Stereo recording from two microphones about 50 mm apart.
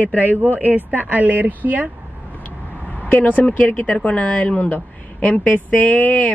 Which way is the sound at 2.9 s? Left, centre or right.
Left.